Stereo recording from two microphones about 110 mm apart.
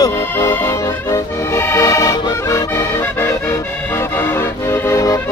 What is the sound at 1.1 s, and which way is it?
Accordion, 25° left (ahead or behind).